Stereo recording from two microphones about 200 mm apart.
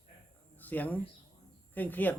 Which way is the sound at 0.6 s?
10° left (ahead or behind).